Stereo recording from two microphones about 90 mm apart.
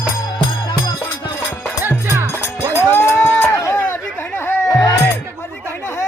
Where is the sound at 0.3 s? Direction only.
45° left (ahead or behind).